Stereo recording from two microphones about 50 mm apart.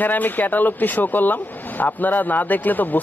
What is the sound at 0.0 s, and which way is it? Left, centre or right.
Speech, left.